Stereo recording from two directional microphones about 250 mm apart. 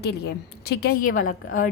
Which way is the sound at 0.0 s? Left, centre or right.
Left.